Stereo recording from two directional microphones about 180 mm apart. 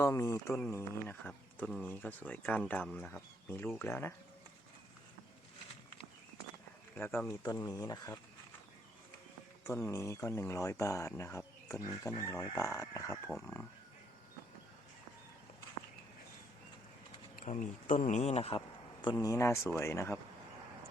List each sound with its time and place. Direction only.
0.0 s speech: 15° left (ahead or behind)
6.9 s speech: 10° left (ahead or behind)
9.6 s speech: 15° left (ahead or behind)
17.3 s speech: 45° left (ahead or behind)
19.1 s speech: 15° left (ahead or behind)